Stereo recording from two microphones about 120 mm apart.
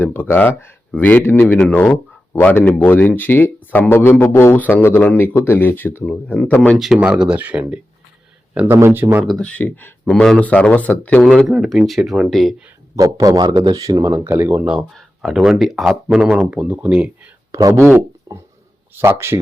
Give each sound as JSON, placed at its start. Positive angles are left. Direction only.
{"t": 0.0, "sound": "speech", "side_deg": 15}
{"t": 6.7, "sound": "speech", "side_deg": 0}
{"t": 9.2, "sound": "speech", "side_deg": 5}
{"t": 13.0, "sound": "speech", "side_deg": -30}
{"t": 14.3, "sound": "speech", "side_deg": -20}
{"t": 14.8, "sound": "speech", "side_deg": 0}
{"t": 17.5, "sound": "speech", "side_deg": -25}
{"t": 18.9, "sound": "speech", "side_deg": -20}